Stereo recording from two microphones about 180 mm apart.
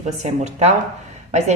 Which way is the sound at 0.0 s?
40° right (ahead or behind).